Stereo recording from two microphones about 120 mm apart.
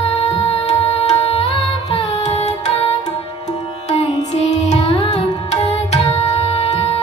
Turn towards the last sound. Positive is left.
turn(degrees=55)  # may be behind; listen again after turning